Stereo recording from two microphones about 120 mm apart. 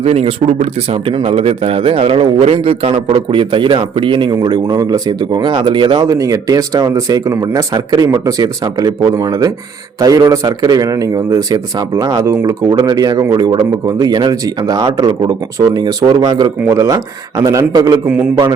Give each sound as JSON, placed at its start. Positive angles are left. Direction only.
{"t": 0.0, "sound": "speech", "side_deg": -60}
{"t": 16.6, "sound": "a man's voice", "side_deg": -25}